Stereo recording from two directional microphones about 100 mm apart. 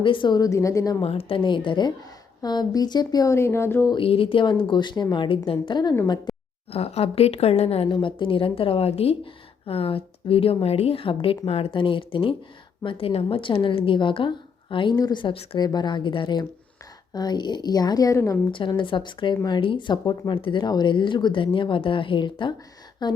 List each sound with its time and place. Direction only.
0.0 s a woman's voice: 55° left (ahead or behind); by 1.0 s 30° left (ahead or behind)
1.0 s speech: 70° left (ahead or behind); by 1.9 s 50° left (ahead or behind)
2.4 s speech: 40° left (ahead or behind)
3.3 s speech: 25° left (ahead or behind)
3.9 s speech: 65° left (ahead or behind); by 5.9 s 50° left (ahead or behind)
6.7 s a woman's voice: 90° left
7.9 s speech: 55° left (ahead or behind)
11.4 s speech: 75° left (ahead or behind); by 14.9 s 55° left (ahead or behind)
14.9 s a woman's voice: 40° left (ahead or behind)
15.2 s speech: 60° left (ahead or behind)
15.5 s a woman's voice: 45° left (ahead or behind)
18.8 s speech: 55° left (ahead or behind)